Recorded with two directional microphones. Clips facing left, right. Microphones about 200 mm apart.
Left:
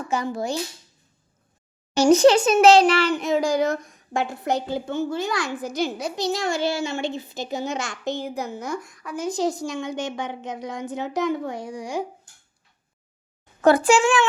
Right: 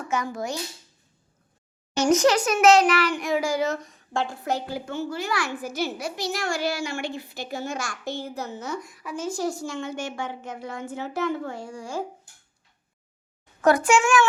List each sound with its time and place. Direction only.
0.1 s a child's voice: 30° left (ahead or behind)
2.0 s a woman's voice: 30° left (ahead or behind)
3.6 s a woman's voice: 10° left (ahead or behind)
8.8 s speech: centre (ahead or behind)
9.1 s a woman's voice: 15° left (ahead or behind)
13.6 s a child's voice: 30° left (ahead or behind)